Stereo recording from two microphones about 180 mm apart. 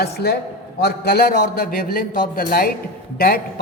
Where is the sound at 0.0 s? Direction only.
65° left (ahead or behind).